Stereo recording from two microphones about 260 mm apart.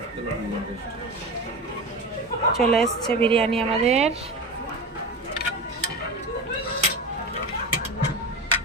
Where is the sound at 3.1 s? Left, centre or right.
Right.